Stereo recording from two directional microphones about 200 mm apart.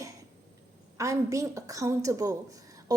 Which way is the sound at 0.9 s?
15° right (ahead or behind).